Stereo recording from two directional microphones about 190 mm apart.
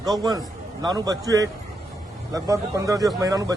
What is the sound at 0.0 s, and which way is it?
Speech, 20° right (ahead or behind).